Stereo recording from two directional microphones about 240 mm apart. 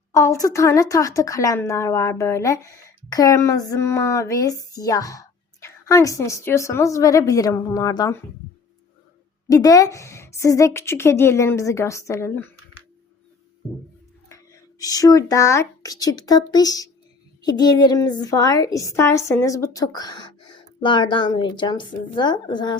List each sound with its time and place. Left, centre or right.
0.1 s a woman's voice: centre
9.5 s a woman's voice: centre
14.8 s a woman's voice: centre